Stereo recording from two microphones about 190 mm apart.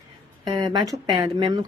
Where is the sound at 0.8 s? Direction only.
20° right (ahead or behind).